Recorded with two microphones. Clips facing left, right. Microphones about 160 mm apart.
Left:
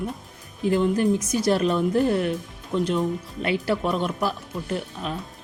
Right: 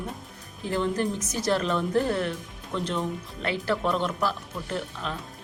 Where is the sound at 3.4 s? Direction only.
15° left (ahead or behind).